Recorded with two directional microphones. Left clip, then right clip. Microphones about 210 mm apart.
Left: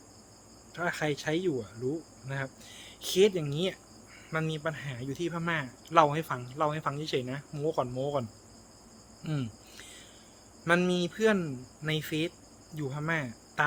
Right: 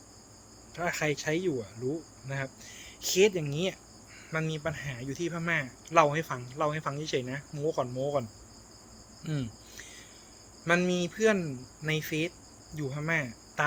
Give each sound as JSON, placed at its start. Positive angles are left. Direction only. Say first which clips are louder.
{"t": 0.8, "sound": "speech", "louder": "right 1 dB", "side_deg": 15}
{"t": 9.2, "sound": "cricket", "louder": "even", "side_deg": 15}
{"t": 10.7, "sound": "speech", "louder": "even", "side_deg": 15}